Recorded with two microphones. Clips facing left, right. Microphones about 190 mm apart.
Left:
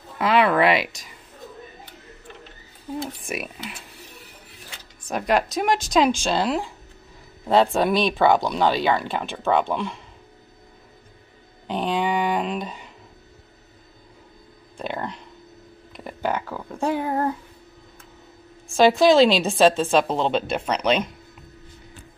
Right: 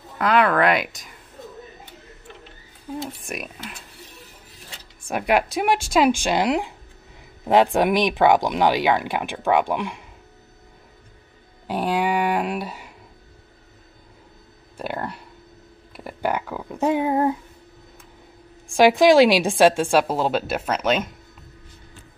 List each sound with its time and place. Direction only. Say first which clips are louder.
0.2 s speech: even; centre (ahead or behind)
3.2 s speech: left 2 dB; centre (ahead or behind)
5.0 s speech: right 1 dB; 10° right (ahead or behind)
11.6 s a sound: right 1 dB; 10° right (ahead or behind)
14.8 s a sound: right 1 dB; 5° right (ahead or behind)
18.7 s speech: right 1 dB; 15° right (ahead or behind)